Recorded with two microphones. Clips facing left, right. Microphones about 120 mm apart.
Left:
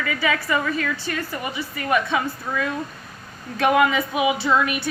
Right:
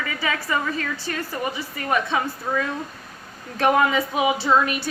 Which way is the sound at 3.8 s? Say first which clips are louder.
Left 1 dB; 30° right (ahead or behind).